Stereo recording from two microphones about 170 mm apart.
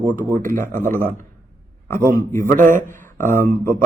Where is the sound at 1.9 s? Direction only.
15° left (ahead or behind).